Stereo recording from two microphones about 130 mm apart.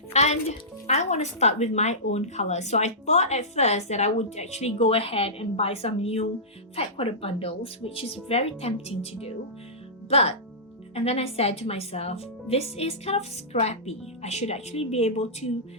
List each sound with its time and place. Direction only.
0.1 s speech: 55° left (ahead or behind)